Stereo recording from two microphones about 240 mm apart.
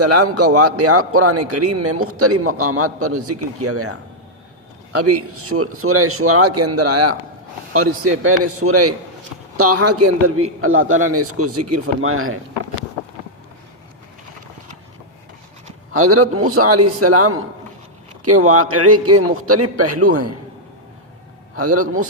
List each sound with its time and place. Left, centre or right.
0.0 s a man's voice: right
8.2 s a man's voice: right
15.9 s a man's voice: right
21.5 s a man's voice: right